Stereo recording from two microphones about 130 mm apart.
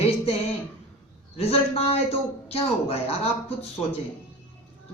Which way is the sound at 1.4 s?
50° left (ahead or behind).